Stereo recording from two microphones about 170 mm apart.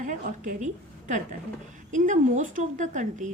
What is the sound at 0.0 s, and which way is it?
A woman's voice, 50° right (ahead or behind).